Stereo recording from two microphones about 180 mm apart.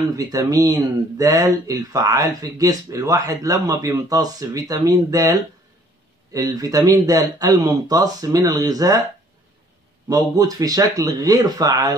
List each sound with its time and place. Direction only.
0.1 s speech: 20° right (ahead or behind)
10.0 s speech: 20° right (ahead or behind)